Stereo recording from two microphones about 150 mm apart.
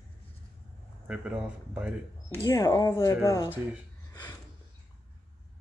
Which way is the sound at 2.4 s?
25° left (ahead or behind).